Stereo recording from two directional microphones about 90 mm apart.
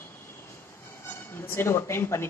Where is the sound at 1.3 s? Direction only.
25° left (ahead or behind).